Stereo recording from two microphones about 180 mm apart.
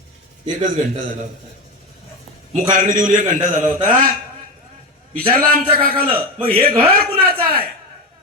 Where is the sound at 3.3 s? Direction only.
45° right (ahead or behind).